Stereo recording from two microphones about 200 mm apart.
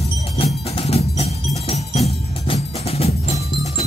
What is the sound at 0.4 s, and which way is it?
Music, 30° left (ahead or behind).